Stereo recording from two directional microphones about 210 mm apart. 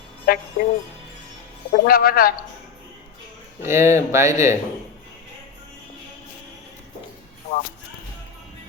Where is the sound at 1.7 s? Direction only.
45° left (ahead or behind).